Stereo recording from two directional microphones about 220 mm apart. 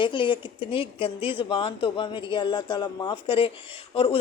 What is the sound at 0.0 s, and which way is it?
Speech, 20° left (ahead or behind).